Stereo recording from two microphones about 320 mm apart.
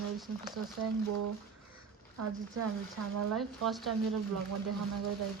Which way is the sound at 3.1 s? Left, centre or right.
Right.